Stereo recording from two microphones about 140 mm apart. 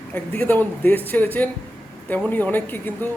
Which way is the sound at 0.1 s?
10° left (ahead or behind).